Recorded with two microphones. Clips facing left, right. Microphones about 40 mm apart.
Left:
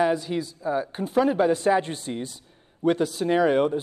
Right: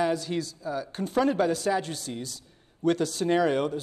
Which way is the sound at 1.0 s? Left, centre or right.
Centre.